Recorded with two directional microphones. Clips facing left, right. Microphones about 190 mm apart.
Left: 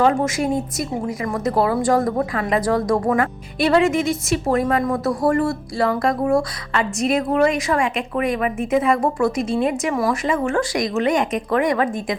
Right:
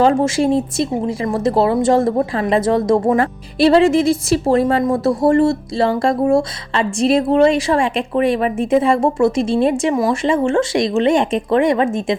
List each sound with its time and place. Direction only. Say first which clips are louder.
0.0 s speech: right 4 dB; 30° right (ahead or behind)